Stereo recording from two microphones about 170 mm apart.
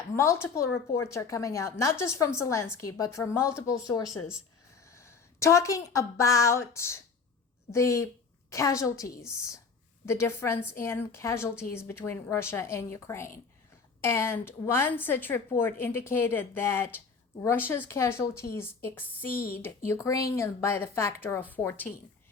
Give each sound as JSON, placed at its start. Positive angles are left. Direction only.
{"t": 0.2, "sound": "a woman's voice", "side_deg": 15}
{"t": 19.3, "sound": "a woman's voice", "side_deg": 60}
{"t": 19.5, "sound": "a woman's voice", "side_deg": 15}